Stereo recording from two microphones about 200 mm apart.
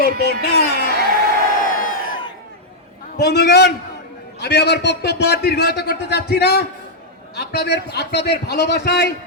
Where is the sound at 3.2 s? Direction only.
55° left (ahead or behind).